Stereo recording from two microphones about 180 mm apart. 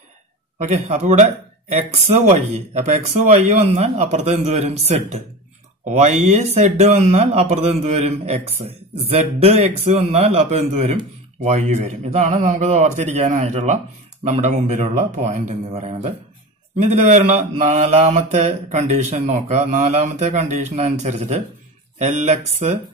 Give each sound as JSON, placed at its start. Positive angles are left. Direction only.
{"t": 0.6, "sound": "speech", "side_deg": -40}